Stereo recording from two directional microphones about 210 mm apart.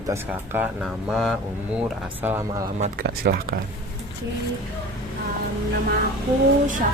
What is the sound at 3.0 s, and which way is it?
Speech, 45° right (ahead or behind).